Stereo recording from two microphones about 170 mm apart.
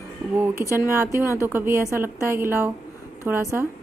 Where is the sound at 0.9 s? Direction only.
15° right (ahead or behind).